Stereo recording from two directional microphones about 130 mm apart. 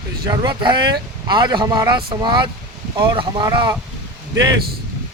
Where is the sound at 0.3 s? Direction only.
35° right (ahead or behind).